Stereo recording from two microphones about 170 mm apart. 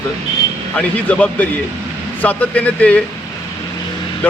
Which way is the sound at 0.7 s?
10° left (ahead or behind).